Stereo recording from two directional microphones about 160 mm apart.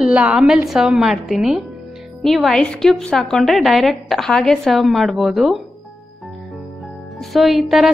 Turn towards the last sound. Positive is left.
turn(degrees=0)  # may be behind; listen again after turning